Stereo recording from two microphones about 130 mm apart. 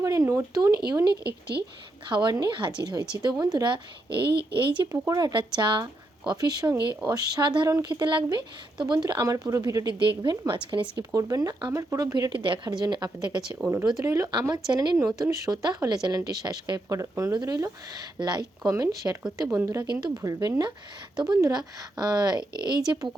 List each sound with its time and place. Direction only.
0.0 s speech: 25° right (ahead or behind); by 4.7 s 40° right (ahead or behind)
4.9 s speech: 25° right (ahead or behind)
10.9 s speech: 25° right (ahead or behind)
12.1 s speech: 35° right (ahead or behind)